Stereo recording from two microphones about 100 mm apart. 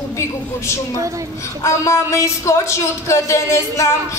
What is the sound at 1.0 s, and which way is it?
Speech, 35° right (ahead or behind).